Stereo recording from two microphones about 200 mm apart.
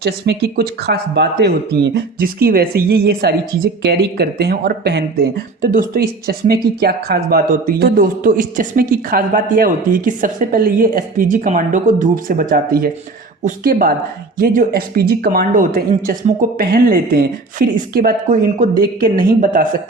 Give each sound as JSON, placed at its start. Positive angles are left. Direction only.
{"t": 0.0, "sound": "speech", "side_deg": -50}